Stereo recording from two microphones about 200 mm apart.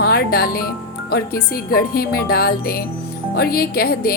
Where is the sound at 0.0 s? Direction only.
50° left (ahead or behind).